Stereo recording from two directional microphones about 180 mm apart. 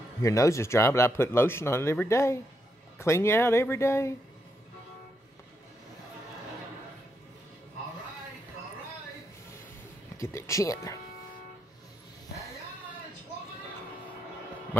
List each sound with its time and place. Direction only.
0.2 s speech: 15° left (ahead or behind)
10.1 s speech: 15° left (ahead or behind)